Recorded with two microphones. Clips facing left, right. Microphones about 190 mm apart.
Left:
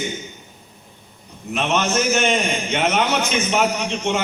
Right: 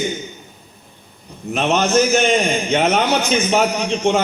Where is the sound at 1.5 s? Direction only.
35° right (ahead or behind).